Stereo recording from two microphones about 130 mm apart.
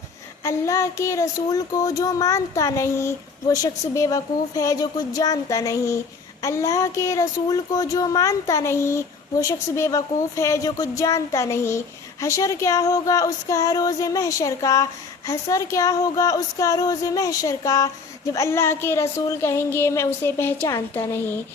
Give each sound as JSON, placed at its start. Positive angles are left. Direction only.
{"t": 0.4, "sound": "speech", "side_deg": 25}